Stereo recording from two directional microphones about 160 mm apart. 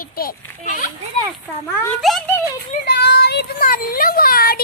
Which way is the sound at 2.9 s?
90° left.